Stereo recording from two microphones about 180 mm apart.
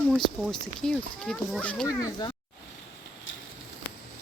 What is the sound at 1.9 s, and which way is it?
Speech, 20° left (ahead or behind).